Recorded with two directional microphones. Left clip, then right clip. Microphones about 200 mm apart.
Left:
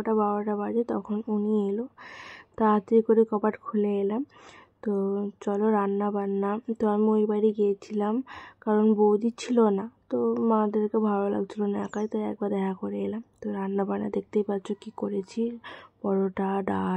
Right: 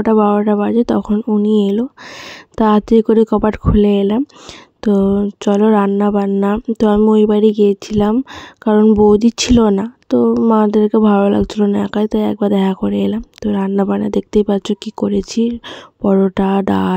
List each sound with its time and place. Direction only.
0.0 s speech: 50° right (ahead or behind)